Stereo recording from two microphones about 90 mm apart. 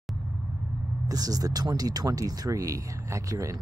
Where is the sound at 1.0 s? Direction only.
45° right (ahead or behind).